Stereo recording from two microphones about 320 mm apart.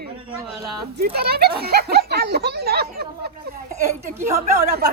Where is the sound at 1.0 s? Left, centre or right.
Right.